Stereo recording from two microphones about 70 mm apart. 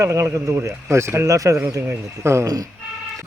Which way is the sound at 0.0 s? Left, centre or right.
Right.